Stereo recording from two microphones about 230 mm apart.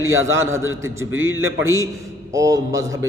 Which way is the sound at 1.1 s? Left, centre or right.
Right.